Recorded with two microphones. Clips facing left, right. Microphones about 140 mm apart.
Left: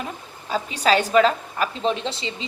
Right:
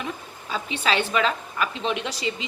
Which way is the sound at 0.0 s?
40° left (ahead or behind).